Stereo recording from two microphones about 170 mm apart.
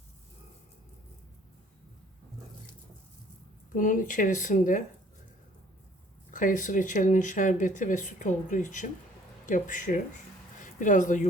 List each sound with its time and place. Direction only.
3.8 s speech: 50° left (ahead or behind)
6.3 s speech: 50° left (ahead or behind)